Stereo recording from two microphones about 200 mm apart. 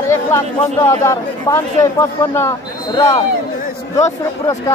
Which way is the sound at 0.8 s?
15° left (ahead or behind).